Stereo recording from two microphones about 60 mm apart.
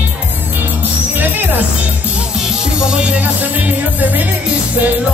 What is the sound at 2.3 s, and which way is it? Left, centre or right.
Music, centre.